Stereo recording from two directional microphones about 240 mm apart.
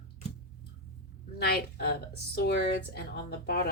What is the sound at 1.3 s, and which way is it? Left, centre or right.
Speech, left.